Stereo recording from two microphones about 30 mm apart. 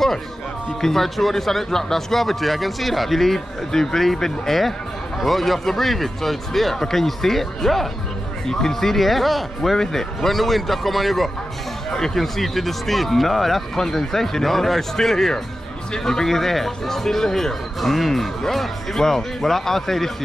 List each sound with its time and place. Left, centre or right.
0.7 s speech: centre
8.9 s speech: centre
9.6 s speech: centre
11.9 s speech: centre
12.2 s speech: centre
17.7 s speech: centre